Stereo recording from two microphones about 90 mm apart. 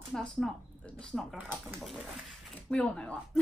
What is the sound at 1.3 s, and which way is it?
Speech, 20° right (ahead or behind).